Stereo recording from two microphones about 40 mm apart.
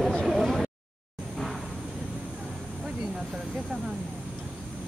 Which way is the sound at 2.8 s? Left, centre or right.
Centre.